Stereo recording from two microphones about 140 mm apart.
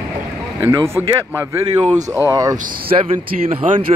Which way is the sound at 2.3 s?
25° right (ahead or behind).